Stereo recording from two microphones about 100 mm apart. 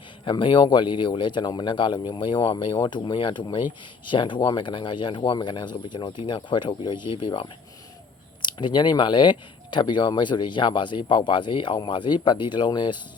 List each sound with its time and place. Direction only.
0.3 s speech: 55° left (ahead or behind)